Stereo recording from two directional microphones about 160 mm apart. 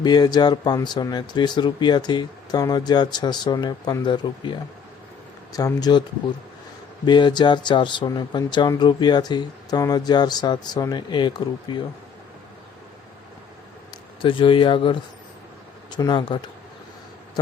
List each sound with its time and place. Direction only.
0.0 s speech: 25° left (ahead or behind)
5.5 s speech: 25° left (ahead or behind)
7.0 s speech: 30° left (ahead or behind)
14.2 s speech: 30° left (ahead or behind)